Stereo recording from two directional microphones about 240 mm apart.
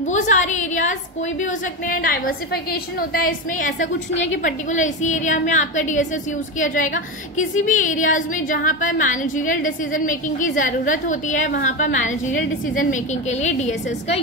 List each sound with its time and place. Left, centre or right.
0.0 s a woman's voice: left